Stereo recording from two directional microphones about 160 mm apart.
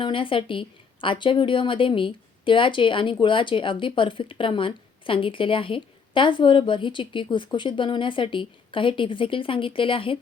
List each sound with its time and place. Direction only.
0.0 s a woman's voice: 30° left (ahead or behind)